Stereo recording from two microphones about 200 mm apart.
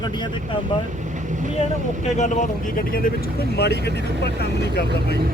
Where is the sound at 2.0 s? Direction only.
35° left (ahead or behind); by 5.2 s 55° left (ahead or behind).